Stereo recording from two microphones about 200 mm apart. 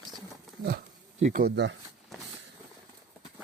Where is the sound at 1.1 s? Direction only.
40° right (ahead or behind).